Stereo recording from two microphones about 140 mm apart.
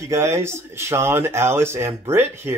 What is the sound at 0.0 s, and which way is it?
Speech, 20° right (ahead or behind).